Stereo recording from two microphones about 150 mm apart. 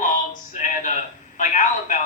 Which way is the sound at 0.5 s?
60° left (ahead or behind).